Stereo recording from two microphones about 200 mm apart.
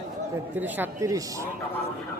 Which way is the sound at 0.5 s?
10° right (ahead or behind).